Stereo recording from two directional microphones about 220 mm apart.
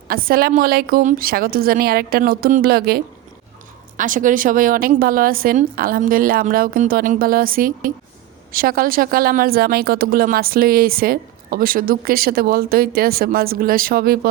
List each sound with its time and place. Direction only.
0.1 s a woman's voice: 40° right (ahead or behind)